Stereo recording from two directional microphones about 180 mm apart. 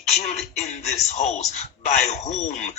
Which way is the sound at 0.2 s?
40° left (ahead or behind).